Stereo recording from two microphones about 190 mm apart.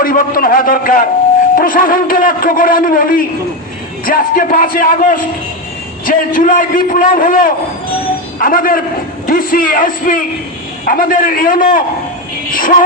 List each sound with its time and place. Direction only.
0.0 s a man's voice: 50° left (ahead or behind)